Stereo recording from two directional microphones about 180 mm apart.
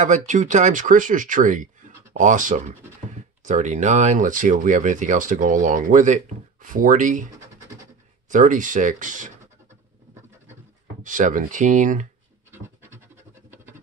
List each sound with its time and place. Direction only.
0.0 s speech: 45° right (ahead or behind)
8.3 s speech: 45° right (ahead or behind)
11.0 s speech: 45° right (ahead or behind)
12.4 s scratch: 15° right (ahead or behind)